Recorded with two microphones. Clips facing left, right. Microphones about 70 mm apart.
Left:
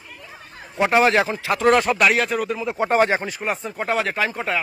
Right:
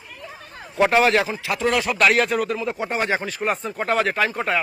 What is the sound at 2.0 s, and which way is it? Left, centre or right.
Speech, centre.